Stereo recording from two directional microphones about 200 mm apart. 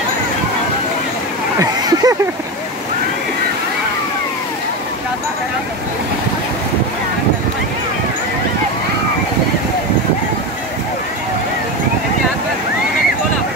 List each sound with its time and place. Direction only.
1.6 s speech: 20° right (ahead or behind)